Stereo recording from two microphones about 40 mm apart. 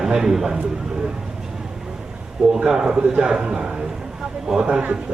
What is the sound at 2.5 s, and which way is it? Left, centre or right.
Speech, centre.